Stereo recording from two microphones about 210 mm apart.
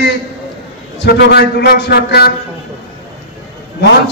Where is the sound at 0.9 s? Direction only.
50° left (ahead or behind).